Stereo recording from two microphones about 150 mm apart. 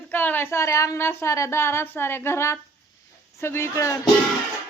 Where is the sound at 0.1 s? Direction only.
15° left (ahead or behind).